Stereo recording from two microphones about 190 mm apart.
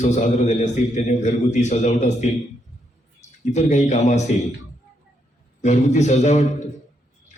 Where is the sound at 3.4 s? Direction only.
35° left (ahead or behind).